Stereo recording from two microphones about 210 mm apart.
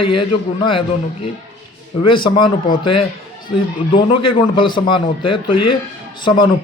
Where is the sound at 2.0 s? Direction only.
25° left (ahead or behind).